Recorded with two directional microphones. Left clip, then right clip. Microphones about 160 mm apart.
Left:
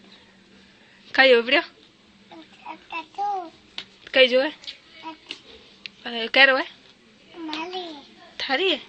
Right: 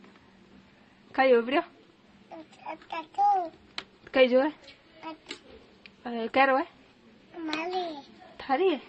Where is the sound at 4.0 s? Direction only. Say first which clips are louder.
Left 5 dB; 25° right (ahead or behind).